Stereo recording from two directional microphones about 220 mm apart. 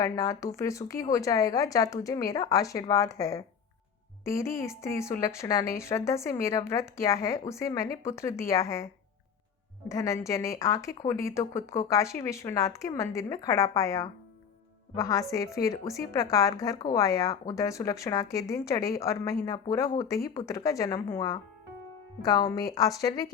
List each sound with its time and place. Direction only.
0.0 s a woman's voice: 15° left (ahead or behind)
9.9 s a woman's voice: 15° left (ahead or behind)